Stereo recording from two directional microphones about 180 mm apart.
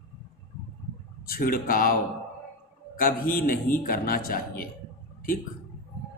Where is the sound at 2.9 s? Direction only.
50° left (ahead or behind).